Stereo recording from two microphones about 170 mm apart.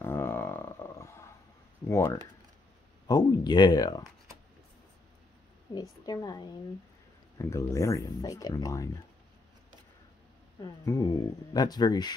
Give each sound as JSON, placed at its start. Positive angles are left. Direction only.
{"t": 0.0, "sound": "roaring cats", "side_deg": 15}
{"t": 1.9, "sound": "speech", "side_deg": 15}
{"t": 5.8, "sound": "speech", "side_deg": 25}
{"t": 10.6, "sound": "speech", "side_deg": 20}